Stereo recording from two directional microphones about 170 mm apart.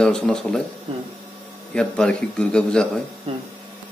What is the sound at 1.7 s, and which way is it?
A man's voice, 5° left (ahead or behind).